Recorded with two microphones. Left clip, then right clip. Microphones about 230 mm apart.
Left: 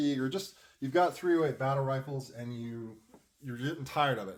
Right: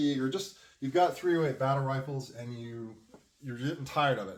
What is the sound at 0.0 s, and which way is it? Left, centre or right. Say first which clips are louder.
Speech: right 1 dB; left.